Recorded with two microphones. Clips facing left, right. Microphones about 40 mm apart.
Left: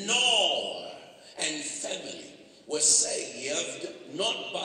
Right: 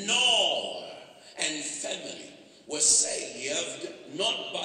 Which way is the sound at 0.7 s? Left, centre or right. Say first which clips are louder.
Left 1 dB; centre.